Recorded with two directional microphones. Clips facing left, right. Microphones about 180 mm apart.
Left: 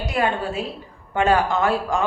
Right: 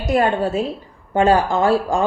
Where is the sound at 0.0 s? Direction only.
45° right (ahead or behind).